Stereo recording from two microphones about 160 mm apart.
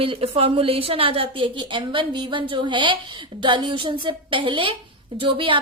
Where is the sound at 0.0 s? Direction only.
35° right (ahead or behind).